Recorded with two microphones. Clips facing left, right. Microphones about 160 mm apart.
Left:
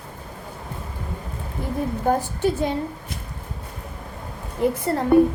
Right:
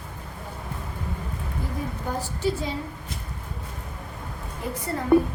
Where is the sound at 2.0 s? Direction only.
55° left (ahead or behind).